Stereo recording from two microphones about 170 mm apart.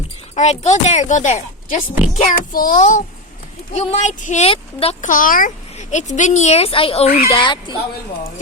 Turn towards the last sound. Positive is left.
turn(degrees=25)  # may be behind; listen again after turning